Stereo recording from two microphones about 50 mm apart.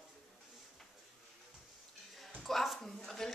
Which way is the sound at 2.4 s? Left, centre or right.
Centre.